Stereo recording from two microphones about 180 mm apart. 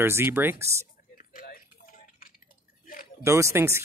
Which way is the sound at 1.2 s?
50° left (ahead or behind).